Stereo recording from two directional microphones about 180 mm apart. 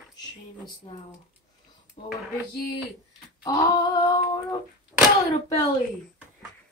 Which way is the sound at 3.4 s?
20° left (ahead or behind).